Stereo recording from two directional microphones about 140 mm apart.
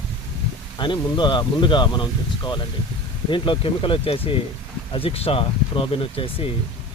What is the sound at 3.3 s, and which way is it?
Speech, 35° left (ahead or behind).